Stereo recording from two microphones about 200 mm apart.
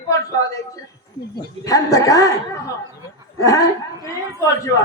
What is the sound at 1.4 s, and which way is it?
A woman's voice, 15° left (ahead or behind).